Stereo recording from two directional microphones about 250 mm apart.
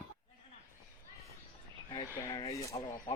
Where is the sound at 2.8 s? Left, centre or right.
Centre.